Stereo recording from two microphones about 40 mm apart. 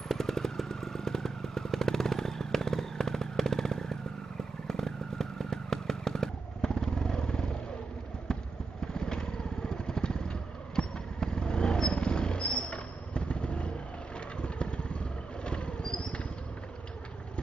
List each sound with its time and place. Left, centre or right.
0.1 s vehicle: centre
8.9 s vehicle: centre